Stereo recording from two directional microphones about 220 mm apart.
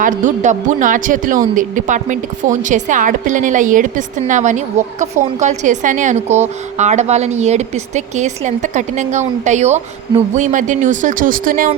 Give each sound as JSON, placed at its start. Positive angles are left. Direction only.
{"t": 0.0, "sound": "a woman's voice", "side_deg": -35}